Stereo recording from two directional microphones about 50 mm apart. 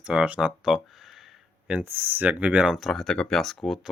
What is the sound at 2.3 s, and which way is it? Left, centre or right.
Speech, right.